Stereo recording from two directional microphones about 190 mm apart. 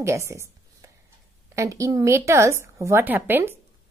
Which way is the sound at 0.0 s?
15° right (ahead or behind).